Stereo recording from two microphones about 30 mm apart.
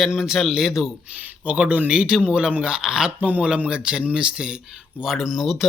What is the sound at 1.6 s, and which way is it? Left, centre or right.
Speech, right.